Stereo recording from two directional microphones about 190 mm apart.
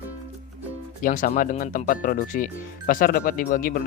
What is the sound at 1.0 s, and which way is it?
Speech, 45° left (ahead or behind).